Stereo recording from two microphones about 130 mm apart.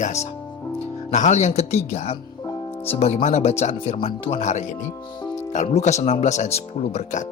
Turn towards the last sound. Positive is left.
turn(degrees=65)  # may be behind; listen again after turning